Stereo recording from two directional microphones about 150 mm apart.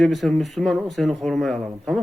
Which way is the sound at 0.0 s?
Centre (ahead or behind).